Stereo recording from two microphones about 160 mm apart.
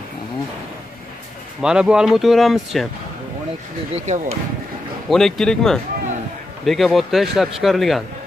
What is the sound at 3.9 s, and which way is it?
Speech, 45° right (ahead or behind).